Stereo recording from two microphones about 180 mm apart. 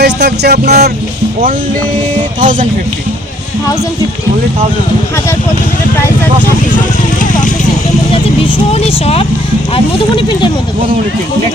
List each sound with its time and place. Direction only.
0.0 s music: 65° right (ahead or behind)
2.4 s speech: 45° right (ahead or behind)
8.1 s speech: 30° left (ahead or behind)